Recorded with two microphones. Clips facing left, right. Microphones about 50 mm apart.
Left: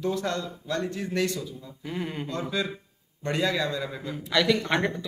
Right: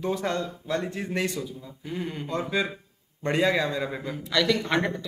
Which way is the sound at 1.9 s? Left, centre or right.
Centre.